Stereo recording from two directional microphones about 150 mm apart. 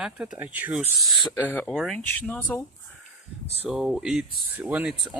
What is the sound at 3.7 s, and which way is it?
Speech, 5° right (ahead or behind).